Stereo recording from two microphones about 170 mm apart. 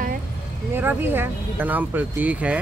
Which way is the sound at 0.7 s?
10° right (ahead or behind).